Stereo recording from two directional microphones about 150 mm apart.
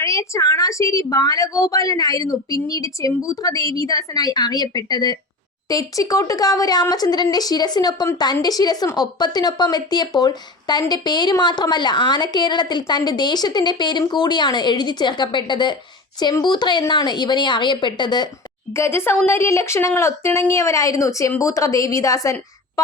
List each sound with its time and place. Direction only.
0.0 s a woman's voice: 20° left (ahead or behind)
18.7 s a woman's voice: 15° left (ahead or behind)